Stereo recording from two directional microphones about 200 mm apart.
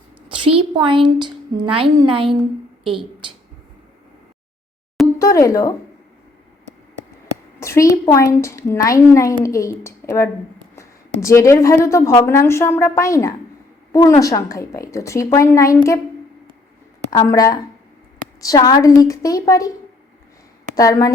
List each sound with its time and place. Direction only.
0.3 s a woman's voice: 25° right (ahead or behind)
5.2 s a woman's voice: 15° left (ahead or behind)
7.6 s a woman's voice: 15° left (ahead or behind)
17.1 s a woman's voice: 15° left (ahead or behind)
20.7 s a woman's voice: 15° left (ahead or behind)